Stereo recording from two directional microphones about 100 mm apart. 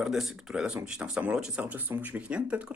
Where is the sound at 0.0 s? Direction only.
Centre (ahead or behind).